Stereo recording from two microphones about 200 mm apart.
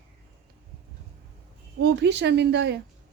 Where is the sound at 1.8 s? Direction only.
60° right (ahead or behind).